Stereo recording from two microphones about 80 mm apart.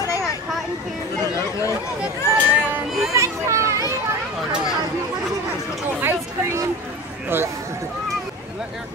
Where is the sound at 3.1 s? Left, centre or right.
Right.